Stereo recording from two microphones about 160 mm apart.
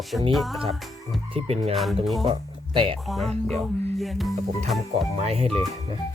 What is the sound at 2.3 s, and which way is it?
Speech, 30° right (ahead or behind).